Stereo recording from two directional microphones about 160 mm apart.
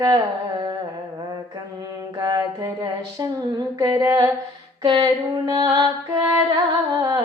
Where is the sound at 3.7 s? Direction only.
25° right (ahead or behind).